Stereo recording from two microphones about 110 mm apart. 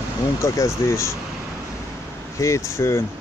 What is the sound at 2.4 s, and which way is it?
Speech, 25° left (ahead or behind).